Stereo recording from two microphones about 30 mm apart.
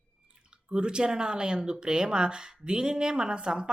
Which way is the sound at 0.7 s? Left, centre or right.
Right.